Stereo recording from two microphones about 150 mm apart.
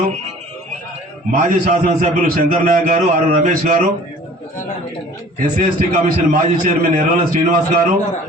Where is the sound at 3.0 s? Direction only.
55° right (ahead or behind).